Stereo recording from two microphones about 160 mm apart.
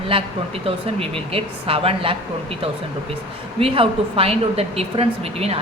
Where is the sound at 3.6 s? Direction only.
35° right (ahead or behind).